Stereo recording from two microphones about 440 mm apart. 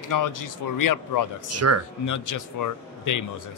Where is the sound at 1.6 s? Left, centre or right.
Right.